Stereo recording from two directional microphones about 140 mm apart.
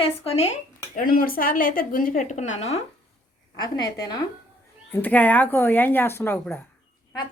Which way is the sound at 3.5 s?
30° left (ahead or behind).